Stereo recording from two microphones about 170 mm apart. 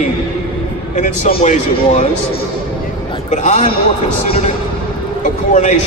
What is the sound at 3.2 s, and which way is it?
Speech, 45° left (ahead or behind).